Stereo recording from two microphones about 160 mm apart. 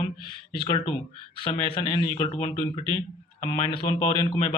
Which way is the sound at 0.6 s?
30° left (ahead or behind).